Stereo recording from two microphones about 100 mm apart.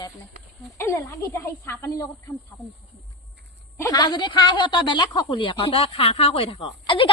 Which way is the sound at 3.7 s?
35° left (ahead or behind).